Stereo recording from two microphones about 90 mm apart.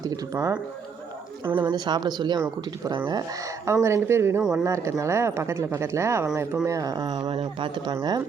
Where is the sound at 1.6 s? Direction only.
55° right (ahead or behind).